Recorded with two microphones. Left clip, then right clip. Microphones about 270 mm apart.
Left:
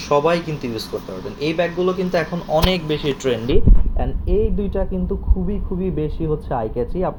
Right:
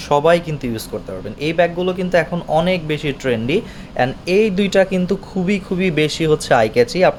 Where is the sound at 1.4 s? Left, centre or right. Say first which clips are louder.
Right 3 dB; right.